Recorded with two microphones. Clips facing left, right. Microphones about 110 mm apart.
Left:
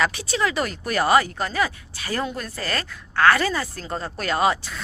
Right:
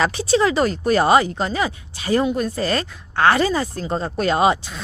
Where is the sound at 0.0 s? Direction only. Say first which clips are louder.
Right 6 dB; 30° right (ahead or behind).